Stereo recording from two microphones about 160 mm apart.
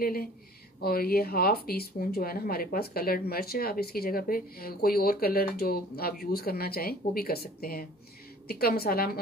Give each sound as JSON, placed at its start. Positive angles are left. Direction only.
{"t": 0.0, "sound": "speech", "side_deg": 70}